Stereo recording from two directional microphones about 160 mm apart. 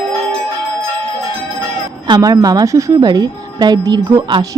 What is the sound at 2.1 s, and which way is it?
A woman's voice, 20° right (ahead or behind).